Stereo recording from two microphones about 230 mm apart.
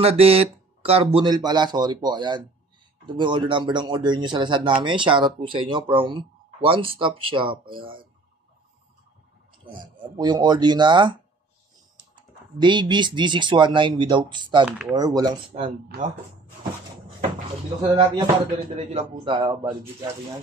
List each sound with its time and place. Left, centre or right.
0.0 s speech: right
9.7 s speech: centre
12.5 s speech: centre
14.6 s speech: centre
15.0 s speech: centre
15.9 s speech: right
17.8 s speech: right